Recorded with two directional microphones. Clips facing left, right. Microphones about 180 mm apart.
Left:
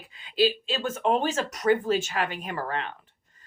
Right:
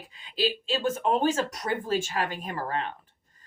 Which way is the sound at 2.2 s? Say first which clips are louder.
Left 1 dB; 45° right (ahead or behind).